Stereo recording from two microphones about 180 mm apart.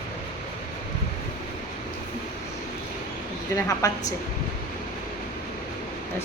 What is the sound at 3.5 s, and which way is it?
Speech, 20° left (ahead or behind).